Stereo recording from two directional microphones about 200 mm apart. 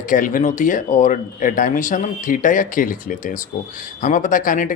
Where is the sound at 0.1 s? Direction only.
40° left (ahead or behind).